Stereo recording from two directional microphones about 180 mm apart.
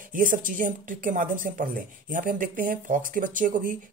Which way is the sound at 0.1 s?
50° right (ahead or behind).